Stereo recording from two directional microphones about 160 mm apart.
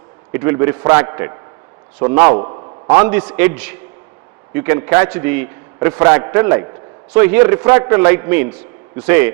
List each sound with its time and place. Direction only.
0.3 s a man's voice: 15° right (ahead or behind)
2.3 s a sound: 30° right (ahead or behind)
2.9 s a man's voice: 10° right (ahead or behind)